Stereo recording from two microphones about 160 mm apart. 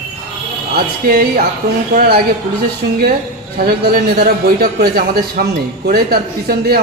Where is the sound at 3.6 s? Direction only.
80° right.